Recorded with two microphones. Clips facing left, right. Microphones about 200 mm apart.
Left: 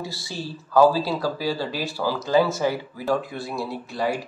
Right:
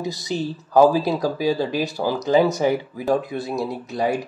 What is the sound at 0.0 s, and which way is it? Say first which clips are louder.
Speech: right 7 dB; 20° right (ahead or behind).